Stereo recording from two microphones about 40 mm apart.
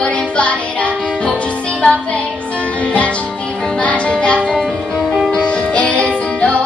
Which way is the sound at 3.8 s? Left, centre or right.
Left.